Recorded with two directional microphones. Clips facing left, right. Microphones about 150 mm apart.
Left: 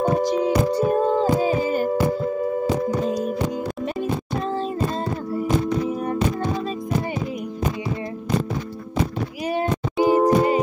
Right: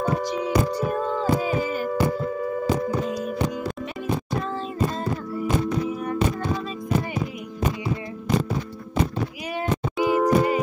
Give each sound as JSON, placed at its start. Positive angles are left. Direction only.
{"t": 0.0, "sound": "music", "side_deg": 40}
{"t": 2.9, "sound": "music", "side_deg": 40}
{"t": 9.5, "sound": "music", "side_deg": 30}